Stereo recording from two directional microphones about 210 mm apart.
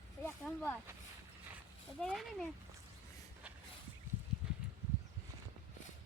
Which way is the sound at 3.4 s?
5° right (ahead or behind).